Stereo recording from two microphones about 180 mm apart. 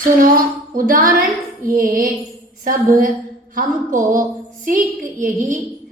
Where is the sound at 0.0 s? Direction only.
50° right (ahead or behind).